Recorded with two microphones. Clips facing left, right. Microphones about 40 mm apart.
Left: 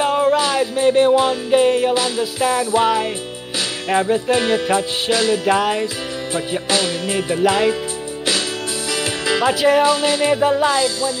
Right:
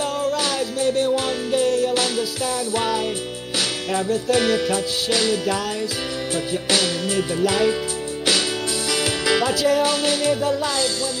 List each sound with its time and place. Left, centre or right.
0.0 s music: left
2.0 s music: centre; by 5.9 s left
7.1 s music: left
7.4 s music: left
9.2 s music: left